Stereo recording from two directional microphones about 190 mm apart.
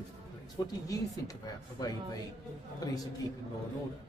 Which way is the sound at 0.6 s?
20° left (ahead or behind).